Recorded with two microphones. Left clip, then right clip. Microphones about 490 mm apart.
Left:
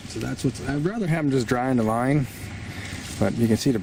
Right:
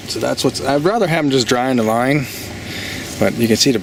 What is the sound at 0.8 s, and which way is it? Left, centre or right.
Speech, centre.